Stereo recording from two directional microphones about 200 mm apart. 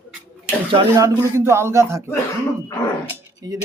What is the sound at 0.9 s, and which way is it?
A man's voice, 15° right (ahead or behind).